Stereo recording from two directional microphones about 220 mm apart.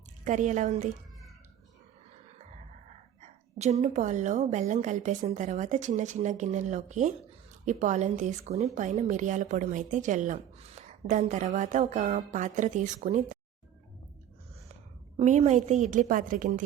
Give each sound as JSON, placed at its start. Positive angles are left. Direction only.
{"t": 0.3, "sound": "a woman's voice", "side_deg": -35}
{"t": 3.6, "sound": "a woman's voice", "side_deg": -30}
{"t": 15.2, "sound": "a woman's voice", "side_deg": -30}